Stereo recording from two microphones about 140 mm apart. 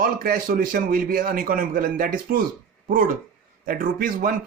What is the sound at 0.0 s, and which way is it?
A man's voice, 80° right.